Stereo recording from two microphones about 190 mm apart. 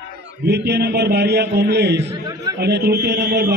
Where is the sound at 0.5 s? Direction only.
60° right (ahead or behind).